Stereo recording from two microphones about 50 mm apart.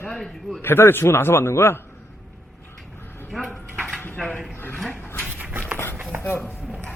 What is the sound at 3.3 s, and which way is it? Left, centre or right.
Speech, centre.